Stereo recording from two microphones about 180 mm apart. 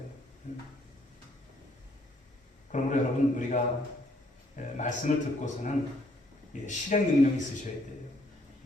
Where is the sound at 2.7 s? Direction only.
45° left (ahead or behind).